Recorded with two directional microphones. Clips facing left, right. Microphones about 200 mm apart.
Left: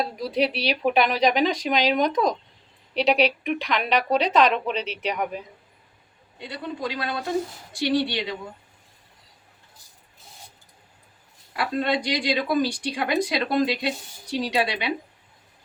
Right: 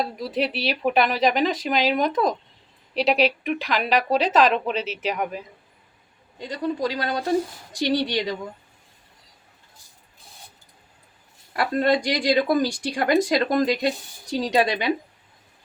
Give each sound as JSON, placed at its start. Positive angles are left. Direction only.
{"t": 0.0, "sound": "speech", "side_deg": 0}
{"t": 6.4, "sound": "speech", "side_deg": -40}
{"t": 11.5, "sound": "speech", "side_deg": -45}